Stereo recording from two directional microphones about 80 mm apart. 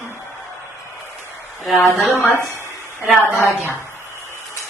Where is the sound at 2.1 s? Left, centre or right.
Left.